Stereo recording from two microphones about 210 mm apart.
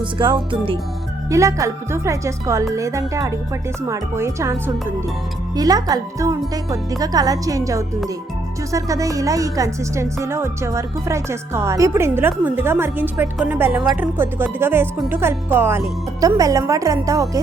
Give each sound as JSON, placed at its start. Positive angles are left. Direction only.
{"t": 0.0, "sound": "music", "side_deg": -20}
{"t": 1.3, "sound": "speech", "side_deg": -15}